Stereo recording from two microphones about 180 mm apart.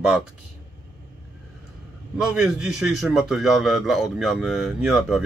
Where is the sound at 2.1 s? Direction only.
Centre (ahead or behind).